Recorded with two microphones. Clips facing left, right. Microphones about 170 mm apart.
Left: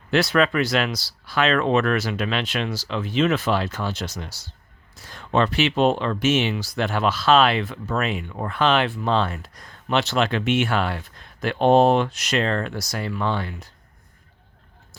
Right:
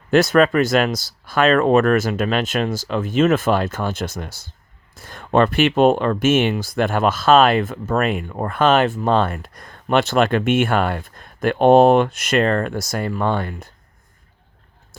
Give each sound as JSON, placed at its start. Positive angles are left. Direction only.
{"t": 0.1, "sound": "speech", "side_deg": -45}